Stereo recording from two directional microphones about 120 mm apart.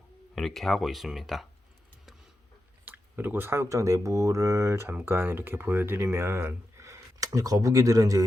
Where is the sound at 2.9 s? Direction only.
15° right (ahead or behind).